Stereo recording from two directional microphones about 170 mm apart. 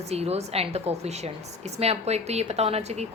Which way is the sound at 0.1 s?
40° right (ahead or behind).